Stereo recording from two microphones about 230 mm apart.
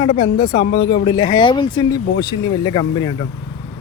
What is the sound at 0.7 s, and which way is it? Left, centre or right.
Speech, left.